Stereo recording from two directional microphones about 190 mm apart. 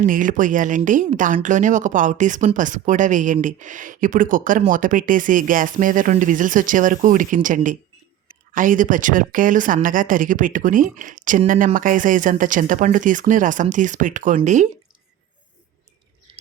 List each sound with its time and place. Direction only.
0.0 s speech: 45° right (ahead or behind)
16.3 s bird: 30° right (ahead or behind)